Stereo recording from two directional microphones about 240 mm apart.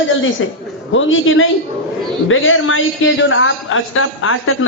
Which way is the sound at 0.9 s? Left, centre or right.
Left.